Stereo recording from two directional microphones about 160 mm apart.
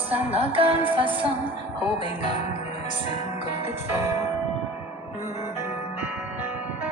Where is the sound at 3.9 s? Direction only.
15° right (ahead or behind).